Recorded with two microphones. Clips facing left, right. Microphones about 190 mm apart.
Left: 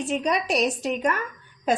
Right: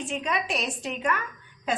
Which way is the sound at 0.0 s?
40° left (ahead or behind).